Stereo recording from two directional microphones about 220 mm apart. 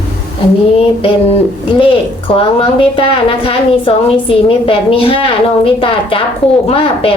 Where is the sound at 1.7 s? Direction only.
25° left (ahead or behind).